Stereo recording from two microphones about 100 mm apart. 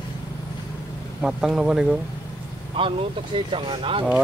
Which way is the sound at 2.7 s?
60° right (ahead or behind).